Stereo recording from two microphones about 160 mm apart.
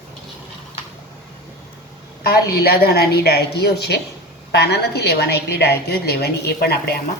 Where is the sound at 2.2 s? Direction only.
80° left.